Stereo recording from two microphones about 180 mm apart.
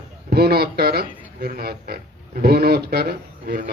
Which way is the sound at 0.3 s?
60° right (ahead or behind).